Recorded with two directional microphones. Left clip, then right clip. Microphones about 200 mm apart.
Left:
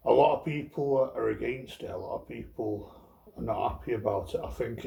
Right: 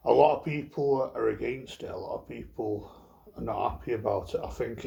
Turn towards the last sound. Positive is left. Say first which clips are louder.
# right 1 dB
turn(degrees=-30)  # may be behind; listen again after turning